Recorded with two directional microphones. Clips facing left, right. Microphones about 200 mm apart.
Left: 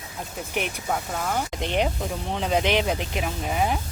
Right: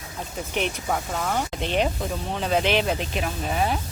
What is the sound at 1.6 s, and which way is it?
Speech, 15° left (ahead or behind).